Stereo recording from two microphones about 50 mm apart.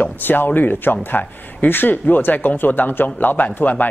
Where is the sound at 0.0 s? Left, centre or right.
Left.